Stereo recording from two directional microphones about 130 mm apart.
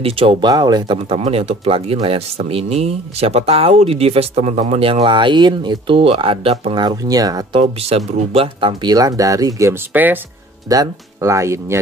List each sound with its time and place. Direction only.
0.0 s speech: 45° right (ahead or behind)
0.5 s speech: 30° right (ahead or behind)
1.0 s speech: 50° right (ahead or behind)
6.7 s speech: 35° right (ahead or behind)
7.8 s speech: 50° right (ahead or behind)
8.9 s speech: 25° right (ahead or behind)
10.7 s speech: 25° right (ahead or behind)